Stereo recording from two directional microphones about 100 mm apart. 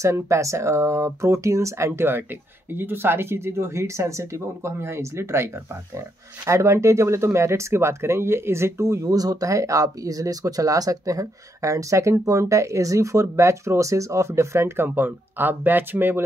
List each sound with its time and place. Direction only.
0.0 s speech: 30° right (ahead or behind)